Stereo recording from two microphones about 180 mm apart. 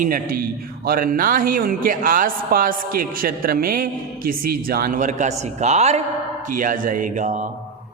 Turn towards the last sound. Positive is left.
turn(degrees=-45)  # may be behind; listen again after turning